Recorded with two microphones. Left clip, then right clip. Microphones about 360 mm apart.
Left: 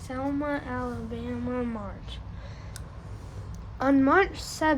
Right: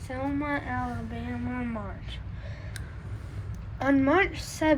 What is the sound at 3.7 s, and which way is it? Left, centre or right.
Speech, centre.